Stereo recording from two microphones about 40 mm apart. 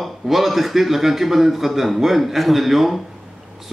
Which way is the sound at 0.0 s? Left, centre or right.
Centre.